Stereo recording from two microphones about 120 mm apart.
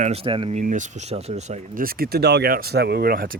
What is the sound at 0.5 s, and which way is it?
Speech, 90° right.